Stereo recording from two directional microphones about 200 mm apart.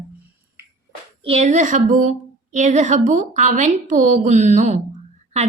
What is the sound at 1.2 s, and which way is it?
Speech, 30° right (ahead or behind).